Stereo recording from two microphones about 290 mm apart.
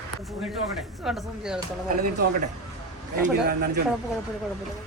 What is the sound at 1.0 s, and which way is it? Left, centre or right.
Speech, centre.